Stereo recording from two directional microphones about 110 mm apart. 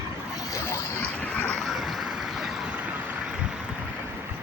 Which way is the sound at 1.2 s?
15° left (ahead or behind).